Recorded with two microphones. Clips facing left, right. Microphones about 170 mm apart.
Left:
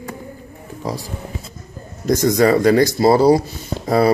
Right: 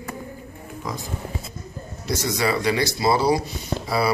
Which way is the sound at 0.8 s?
35° left (ahead or behind).